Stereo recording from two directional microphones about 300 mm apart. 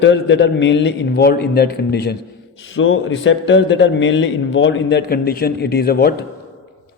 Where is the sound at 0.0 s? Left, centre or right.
Left.